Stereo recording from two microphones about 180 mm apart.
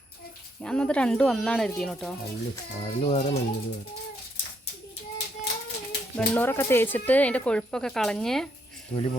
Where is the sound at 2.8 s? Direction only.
30° left (ahead or behind).